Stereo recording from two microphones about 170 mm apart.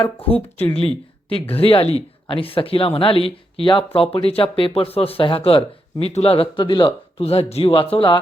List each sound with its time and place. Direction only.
0.0 s speech: 35° left (ahead or behind)
0.3 s speech: 10° left (ahead or behind)
1.3 s speech: 35° left (ahead or behind)